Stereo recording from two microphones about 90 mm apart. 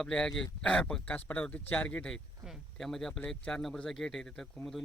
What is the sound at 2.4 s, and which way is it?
Speech, centre (ahead or behind).